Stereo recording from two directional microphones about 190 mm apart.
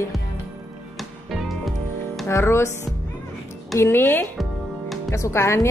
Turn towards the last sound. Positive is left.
turn(degrees=15)  # may be behind; listen again after turning